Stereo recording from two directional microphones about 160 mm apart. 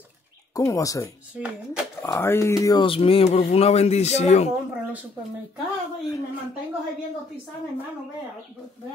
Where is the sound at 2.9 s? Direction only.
35° left (ahead or behind).